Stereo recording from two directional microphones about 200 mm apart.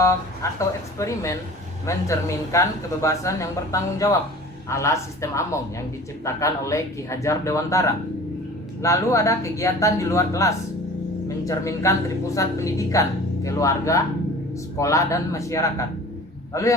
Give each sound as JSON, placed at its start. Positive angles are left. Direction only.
{"t": 0.4, "sound": "speech", "side_deg": 15}